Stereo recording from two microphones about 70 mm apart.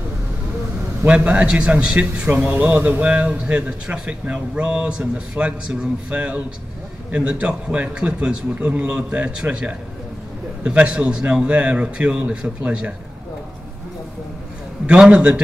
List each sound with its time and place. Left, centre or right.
1.0 s a man's voice: centre
14.9 s speech: centre